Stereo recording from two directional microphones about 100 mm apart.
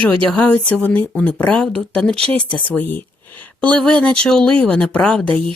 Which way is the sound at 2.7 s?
20° left (ahead or behind).